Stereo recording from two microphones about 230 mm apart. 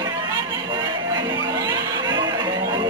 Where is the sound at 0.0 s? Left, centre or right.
Centre.